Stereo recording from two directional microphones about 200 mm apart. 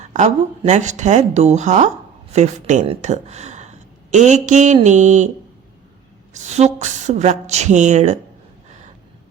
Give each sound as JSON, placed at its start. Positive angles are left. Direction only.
{"t": 0.0, "sound": "a woman's voice", "side_deg": -35}
{"t": 6.3, "sound": "a woman's voice", "side_deg": -35}